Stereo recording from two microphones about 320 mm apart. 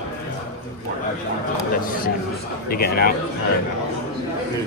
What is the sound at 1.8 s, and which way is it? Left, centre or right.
A man's voice, left.